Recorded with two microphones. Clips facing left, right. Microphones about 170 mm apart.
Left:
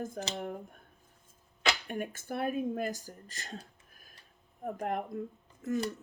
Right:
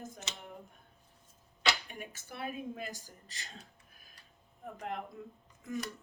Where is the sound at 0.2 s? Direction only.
35° left (ahead or behind).